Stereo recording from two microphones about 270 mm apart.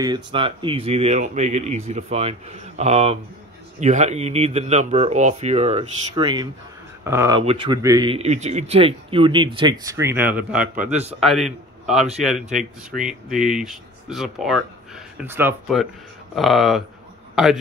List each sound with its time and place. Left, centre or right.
0.0 s a man's voice: centre